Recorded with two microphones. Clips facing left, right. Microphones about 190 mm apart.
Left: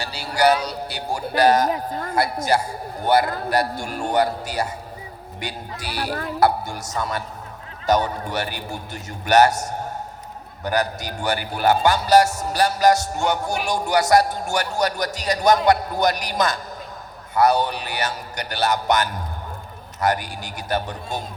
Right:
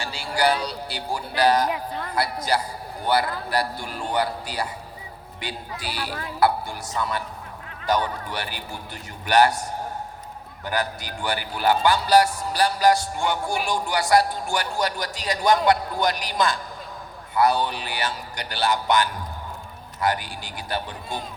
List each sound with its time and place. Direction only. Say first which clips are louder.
0.0 s a man's voice: left 4 dB; 40° left (ahead or behind)